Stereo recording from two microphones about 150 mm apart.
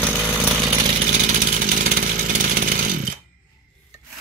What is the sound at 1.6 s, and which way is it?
Chainsaw, 70° right (ahead or behind).